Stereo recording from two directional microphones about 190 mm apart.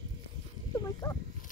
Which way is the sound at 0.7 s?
20° left (ahead or behind).